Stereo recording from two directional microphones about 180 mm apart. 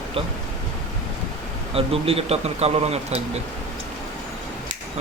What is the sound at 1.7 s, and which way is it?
Speech, 30° right (ahead or behind).